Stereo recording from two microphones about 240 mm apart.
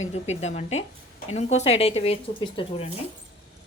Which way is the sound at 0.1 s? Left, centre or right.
Left.